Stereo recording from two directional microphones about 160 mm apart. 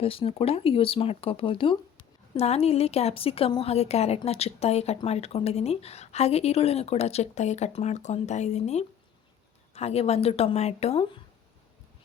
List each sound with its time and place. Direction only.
0.0 s a woman's voice: 35° left (ahead or behind)